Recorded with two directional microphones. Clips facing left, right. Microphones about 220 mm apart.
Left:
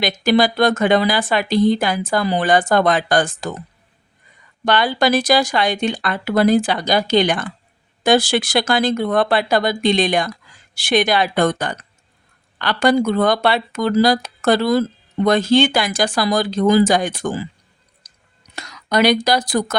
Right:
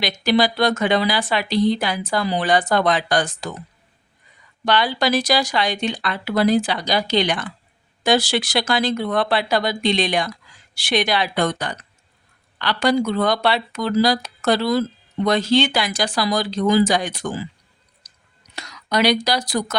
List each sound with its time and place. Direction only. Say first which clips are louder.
0.0 s speech: left 3 dB; 50° left (ahead or behind)
4.6 s speech: left 3 dB; 50° left (ahead or behind)
18.5 s speech: left 3 dB; 50° left (ahead or behind)